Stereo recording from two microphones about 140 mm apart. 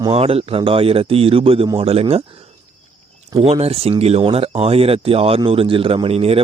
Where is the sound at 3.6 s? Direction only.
45° right (ahead or behind).